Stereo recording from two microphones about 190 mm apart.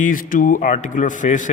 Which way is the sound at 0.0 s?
45° left (ahead or behind).